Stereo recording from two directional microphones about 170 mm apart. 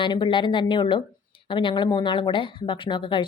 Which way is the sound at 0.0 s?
30° left (ahead or behind).